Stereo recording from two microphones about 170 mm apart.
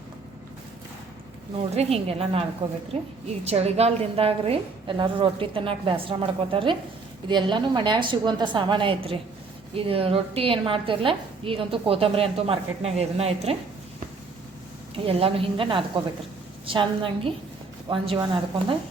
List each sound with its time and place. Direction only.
1.7 s a woman's voice: 35° right (ahead or behind)
14.9 s a woman's voice: 35° right (ahead or behind)